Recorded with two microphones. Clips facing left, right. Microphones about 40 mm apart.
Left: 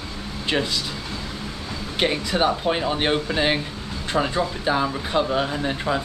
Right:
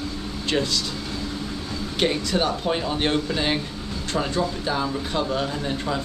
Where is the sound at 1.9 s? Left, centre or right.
Centre.